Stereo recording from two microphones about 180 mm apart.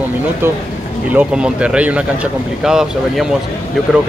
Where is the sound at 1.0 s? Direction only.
5° right (ahead or behind).